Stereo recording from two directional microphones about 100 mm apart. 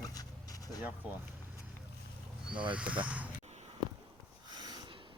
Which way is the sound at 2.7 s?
15° right (ahead or behind).